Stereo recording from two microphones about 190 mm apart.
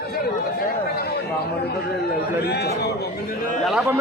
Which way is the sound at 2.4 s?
60° left (ahead or behind).